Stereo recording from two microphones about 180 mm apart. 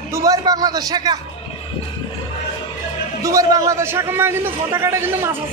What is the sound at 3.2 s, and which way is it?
A man's voice, 20° right (ahead or behind).